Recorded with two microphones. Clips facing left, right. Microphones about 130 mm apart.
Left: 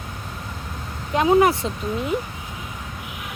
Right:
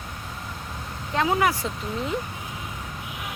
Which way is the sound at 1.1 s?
20° left (ahead or behind).